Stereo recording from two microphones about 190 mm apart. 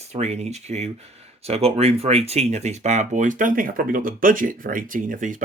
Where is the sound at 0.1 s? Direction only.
35° right (ahead or behind).